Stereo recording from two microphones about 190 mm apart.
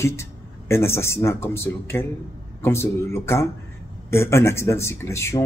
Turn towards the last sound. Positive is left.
turn(degrees=15)  # may be behind; listen again after turning